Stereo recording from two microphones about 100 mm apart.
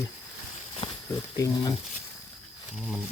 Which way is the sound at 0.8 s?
60° left (ahead or behind).